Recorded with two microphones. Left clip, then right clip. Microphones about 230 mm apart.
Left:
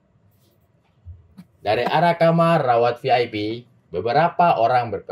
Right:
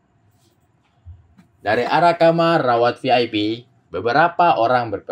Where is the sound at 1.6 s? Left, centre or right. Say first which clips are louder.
Right 2 dB; right.